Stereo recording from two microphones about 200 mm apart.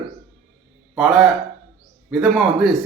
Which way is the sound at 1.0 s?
Centre (ahead or behind).